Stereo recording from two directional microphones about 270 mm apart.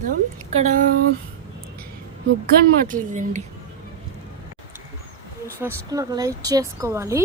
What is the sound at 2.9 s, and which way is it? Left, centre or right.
Speech, right.